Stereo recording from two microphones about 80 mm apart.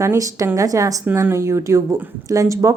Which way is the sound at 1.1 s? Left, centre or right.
Right.